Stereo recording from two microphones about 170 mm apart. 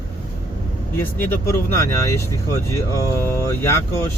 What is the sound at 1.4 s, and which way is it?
Speech, 15° left (ahead or behind).